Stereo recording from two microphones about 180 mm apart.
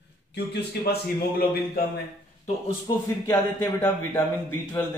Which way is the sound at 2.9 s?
20° left (ahead or behind).